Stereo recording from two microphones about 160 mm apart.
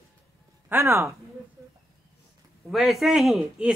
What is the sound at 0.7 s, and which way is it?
Speech, 15° right (ahead or behind).